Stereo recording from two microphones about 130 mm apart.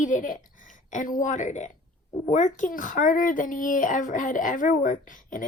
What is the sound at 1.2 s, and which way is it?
A woman's voice, 70° left (ahead or behind).